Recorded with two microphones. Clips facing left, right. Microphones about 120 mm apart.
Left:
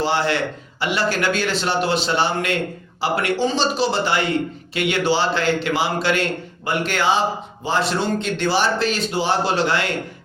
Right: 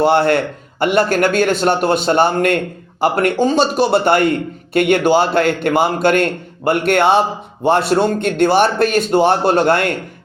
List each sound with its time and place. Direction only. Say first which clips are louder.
0.0 s a man's voice: right 7 dB; 55° right (ahead or behind)